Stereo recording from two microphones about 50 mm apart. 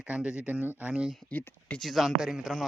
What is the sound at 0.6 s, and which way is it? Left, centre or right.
Speech, right.